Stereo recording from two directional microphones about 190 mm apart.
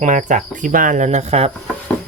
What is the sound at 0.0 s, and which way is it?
Speech, 40° right (ahead or behind).